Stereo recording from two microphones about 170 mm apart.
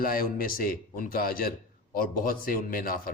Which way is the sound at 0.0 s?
60° left (ahead or behind).